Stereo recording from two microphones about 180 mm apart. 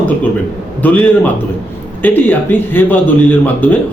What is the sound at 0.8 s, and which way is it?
Speech, 10° left (ahead or behind).